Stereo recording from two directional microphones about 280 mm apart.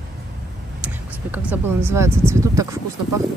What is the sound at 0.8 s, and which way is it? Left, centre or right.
Speech, centre.